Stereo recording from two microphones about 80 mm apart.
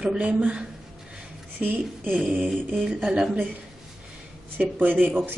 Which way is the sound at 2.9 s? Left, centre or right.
Centre.